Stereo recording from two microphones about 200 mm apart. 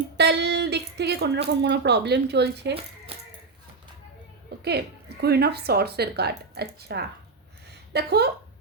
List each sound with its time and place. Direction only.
0.2 s speech: 55° right (ahead or behind)
4.6 s speech: 55° right (ahead or behind)